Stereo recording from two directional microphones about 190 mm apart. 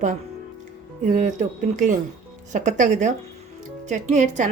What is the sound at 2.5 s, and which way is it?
Speech, 40° right (ahead or behind).